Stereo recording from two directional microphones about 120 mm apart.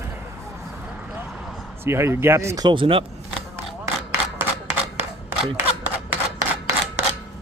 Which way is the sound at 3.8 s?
20° right (ahead or behind).